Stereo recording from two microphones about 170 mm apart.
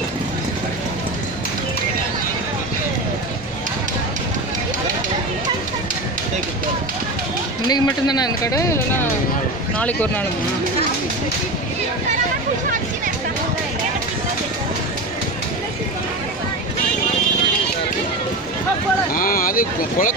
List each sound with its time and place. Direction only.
7.6 s speech: 25° left (ahead or behind)
19.1 s speech: 55° left (ahead or behind)